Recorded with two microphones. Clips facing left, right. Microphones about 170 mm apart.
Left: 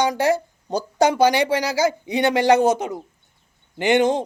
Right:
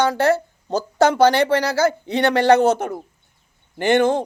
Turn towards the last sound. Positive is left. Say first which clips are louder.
# right 1 dB
turn(degrees=20)  # may be behind; listen again after turning